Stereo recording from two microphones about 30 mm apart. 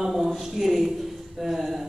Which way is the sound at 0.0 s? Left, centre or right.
Centre.